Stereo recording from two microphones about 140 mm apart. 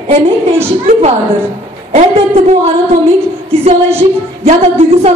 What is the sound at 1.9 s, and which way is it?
Speech, 50° right (ahead or behind).